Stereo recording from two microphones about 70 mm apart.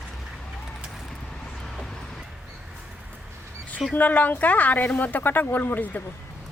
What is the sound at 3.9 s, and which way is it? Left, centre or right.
Speech, left.